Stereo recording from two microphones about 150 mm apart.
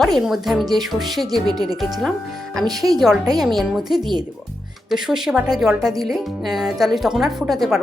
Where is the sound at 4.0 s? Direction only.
30° right (ahead or behind).